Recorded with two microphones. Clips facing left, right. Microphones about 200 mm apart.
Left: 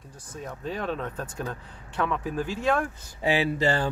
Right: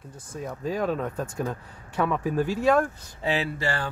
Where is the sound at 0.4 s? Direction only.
5° right (ahead or behind).